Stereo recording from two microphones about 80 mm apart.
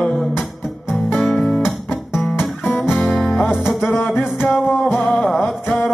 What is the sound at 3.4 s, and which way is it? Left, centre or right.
Music, centre.